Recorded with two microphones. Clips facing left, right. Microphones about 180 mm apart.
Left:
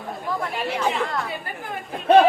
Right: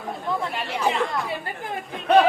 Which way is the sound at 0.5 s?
Centre (ahead or behind).